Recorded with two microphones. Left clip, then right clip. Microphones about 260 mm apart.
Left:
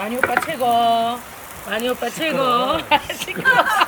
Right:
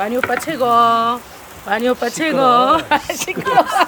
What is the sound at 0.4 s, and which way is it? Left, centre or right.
Speech, centre.